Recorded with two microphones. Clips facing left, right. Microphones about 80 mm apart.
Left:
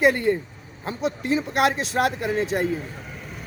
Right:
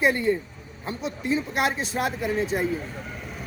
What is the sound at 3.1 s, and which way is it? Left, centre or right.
Vehicle, centre.